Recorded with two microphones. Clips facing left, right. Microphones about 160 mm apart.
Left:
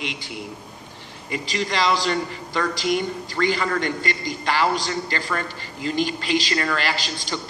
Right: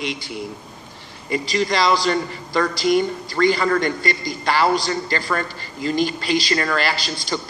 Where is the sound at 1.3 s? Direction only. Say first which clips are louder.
Right 5 dB; 40° right (ahead or behind).